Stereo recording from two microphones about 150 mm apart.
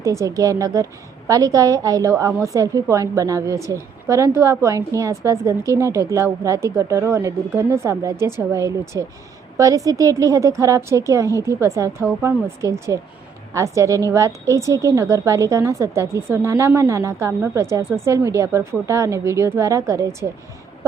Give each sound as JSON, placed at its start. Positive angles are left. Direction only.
{"t": 0.0, "sound": "a woman's voice", "side_deg": -20}